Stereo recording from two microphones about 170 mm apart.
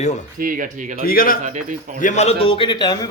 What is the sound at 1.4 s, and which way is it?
Speech, 45° right (ahead or behind).